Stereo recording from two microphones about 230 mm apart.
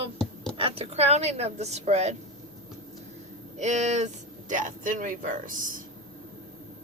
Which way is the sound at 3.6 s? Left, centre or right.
Right.